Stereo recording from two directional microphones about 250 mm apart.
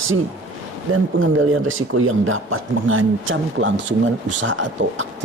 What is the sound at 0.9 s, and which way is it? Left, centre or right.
Speech, right.